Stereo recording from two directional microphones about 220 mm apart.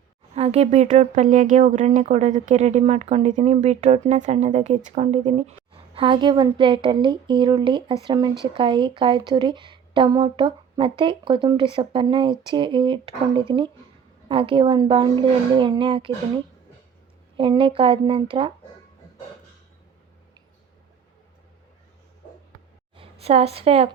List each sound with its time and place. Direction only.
0.3 s speech: 30° right (ahead or behind)
17.3 s speech: 25° right (ahead or behind)
23.0 s a woman's voice: 30° right (ahead or behind)